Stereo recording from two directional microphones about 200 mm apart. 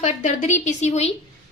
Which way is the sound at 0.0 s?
35° left (ahead or behind).